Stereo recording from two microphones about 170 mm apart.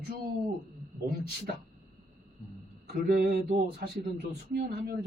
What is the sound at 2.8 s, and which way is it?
Mantra, 60° right (ahead or behind).